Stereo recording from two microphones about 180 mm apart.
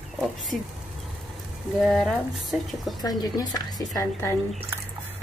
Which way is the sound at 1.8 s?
5° left (ahead or behind).